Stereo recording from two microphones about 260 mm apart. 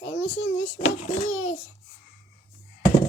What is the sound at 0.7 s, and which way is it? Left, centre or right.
Speech, left.